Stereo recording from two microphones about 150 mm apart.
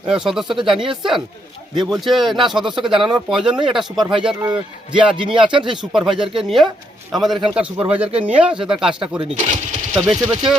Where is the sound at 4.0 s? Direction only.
35° right (ahead or behind).